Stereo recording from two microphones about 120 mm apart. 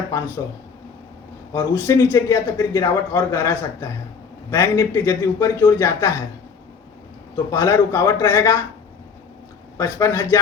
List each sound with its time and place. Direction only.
1.5 s a man's voice: 20° left (ahead or behind)
7.5 s a man's voice: 20° left (ahead or behind)
9.7 s a man's voice: 25° left (ahead or behind)